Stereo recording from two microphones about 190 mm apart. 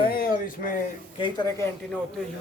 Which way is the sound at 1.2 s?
20° left (ahead or behind).